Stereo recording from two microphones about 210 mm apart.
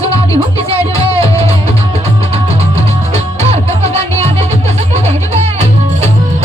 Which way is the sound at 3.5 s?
30° right (ahead or behind).